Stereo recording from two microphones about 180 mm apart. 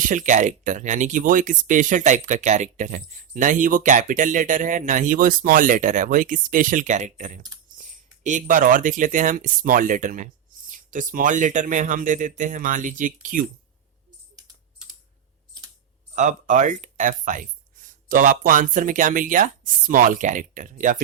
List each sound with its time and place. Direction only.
0.0 s speech: 45° right (ahead or behind)
16.1 s speech: 45° right (ahead or behind)